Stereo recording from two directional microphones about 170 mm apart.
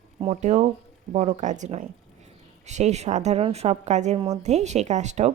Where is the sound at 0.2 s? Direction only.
40° right (ahead or behind).